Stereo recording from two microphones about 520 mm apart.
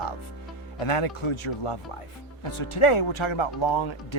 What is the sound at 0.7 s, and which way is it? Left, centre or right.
Speech, left.